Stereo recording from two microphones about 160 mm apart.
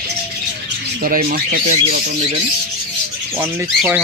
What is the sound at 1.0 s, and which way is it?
Speech, 60° right (ahead or behind).